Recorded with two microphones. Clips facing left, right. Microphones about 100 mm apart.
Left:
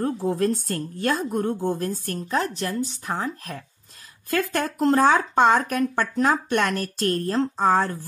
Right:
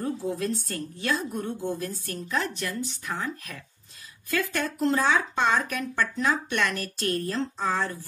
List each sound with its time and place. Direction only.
0.0 s speech: 50° left (ahead or behind)
4.3 s speech: 50° left (ahead or behind)